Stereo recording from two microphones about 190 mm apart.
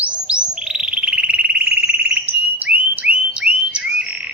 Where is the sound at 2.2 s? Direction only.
5° right (ahead or behind).